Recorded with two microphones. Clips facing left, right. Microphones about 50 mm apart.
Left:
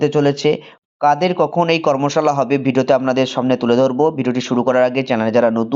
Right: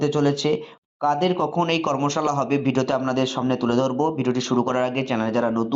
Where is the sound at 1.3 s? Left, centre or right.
Left.